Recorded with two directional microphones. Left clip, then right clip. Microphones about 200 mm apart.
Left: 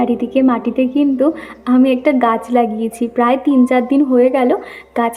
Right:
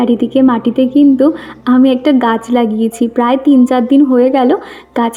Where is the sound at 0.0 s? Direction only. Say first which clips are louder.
Right 4 dB; 35° right (ahead or behind).